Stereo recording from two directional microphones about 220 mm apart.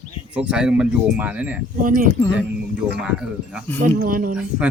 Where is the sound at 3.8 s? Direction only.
35° right (ahead or behind).